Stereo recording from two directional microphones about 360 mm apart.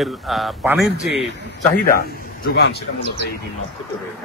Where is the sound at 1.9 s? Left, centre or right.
Left.